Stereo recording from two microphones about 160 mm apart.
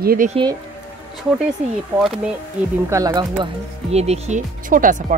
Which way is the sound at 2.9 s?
25° right (ahead or behind).